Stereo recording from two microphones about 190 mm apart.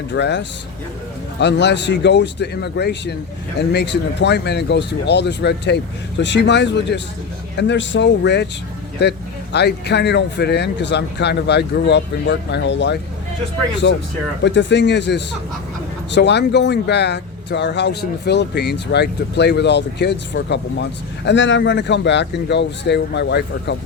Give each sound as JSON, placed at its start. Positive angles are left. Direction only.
{"t": 0.1, "sound": "speech", "side_deg": 65}
{"t": 14.4, "sound": "speech", "side_deg": 65}